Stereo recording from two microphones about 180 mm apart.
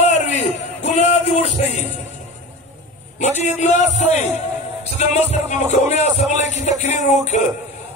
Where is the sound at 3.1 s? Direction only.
40° left (ahead or behind).